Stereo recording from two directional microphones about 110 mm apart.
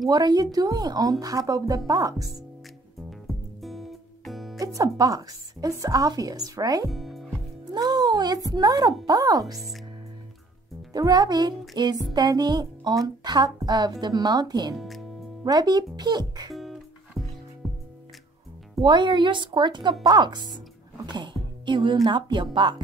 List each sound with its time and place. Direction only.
0.1 s speech: 35° right (ahead or behind)
3.1 s music: centre (ahead or behind)
4.7 s speech: 35° right (ahead or behind)
6.9 s music: centre (ahead or behind)
7.7 s speech: 40° right (ahead or behind)
10.9 s speech: 35° right (ahead or behind)
14.8 s speech: centre (ahead or behind)
15.4 s speech: 35° right (ahead or behind)
16.5 s music: centre (ahead or behind)
18.8 s speech: 45° right (ahead or behind)